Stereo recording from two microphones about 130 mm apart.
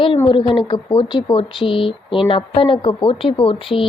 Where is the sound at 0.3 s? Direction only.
40° left (ahead or behind).